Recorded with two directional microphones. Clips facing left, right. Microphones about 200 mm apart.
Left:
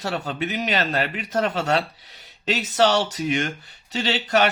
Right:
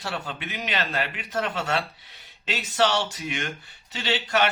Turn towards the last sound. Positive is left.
turn(degrees=40)  # may be behind; listen again after turning